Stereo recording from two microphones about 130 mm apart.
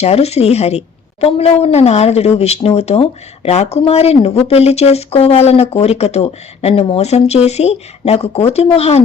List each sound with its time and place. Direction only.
0.0 s speech: 55° left (ahead or behind)